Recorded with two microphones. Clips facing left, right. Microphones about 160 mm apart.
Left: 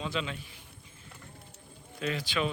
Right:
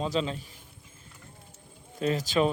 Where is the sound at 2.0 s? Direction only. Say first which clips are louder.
Right 6 dB; 40° right (ahead or behind).